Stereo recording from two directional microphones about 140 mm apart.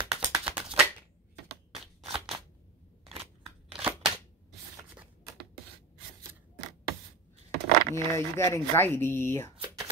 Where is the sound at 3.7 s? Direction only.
5° right (ahead or behind).